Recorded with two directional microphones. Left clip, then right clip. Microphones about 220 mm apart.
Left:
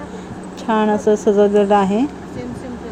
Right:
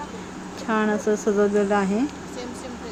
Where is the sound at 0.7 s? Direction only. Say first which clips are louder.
Left 7 dB; 15° left (ahead or behind).